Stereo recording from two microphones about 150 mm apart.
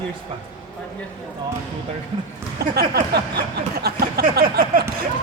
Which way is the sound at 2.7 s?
90° right.